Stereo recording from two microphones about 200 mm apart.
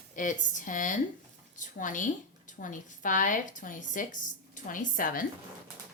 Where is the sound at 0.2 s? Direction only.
40° left (ahead or behind).